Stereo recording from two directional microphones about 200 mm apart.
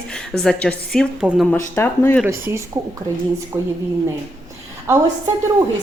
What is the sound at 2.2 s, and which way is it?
A woman's voice, 10° right (ahead or behind).